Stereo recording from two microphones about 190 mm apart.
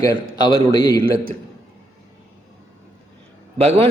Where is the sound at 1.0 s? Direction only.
30° right (ahead or behind).